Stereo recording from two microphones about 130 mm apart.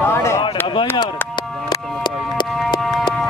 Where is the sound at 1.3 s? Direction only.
35° left (ahead or behind).